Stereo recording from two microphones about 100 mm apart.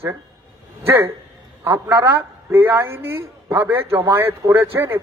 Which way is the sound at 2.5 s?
25° right (ahead or behind).